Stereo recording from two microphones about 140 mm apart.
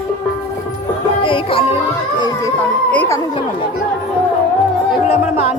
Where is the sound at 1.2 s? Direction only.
40° left (ahead or behind).